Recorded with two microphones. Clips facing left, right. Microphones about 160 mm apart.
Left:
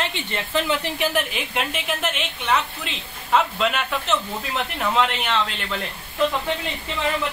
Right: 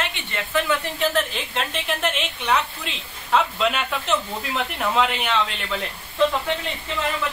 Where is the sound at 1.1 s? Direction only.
5° left (ahead or behind).